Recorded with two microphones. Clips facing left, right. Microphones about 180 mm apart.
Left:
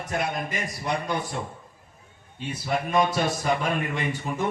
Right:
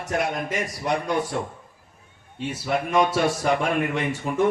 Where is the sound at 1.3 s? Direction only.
60° right (ahead or behind).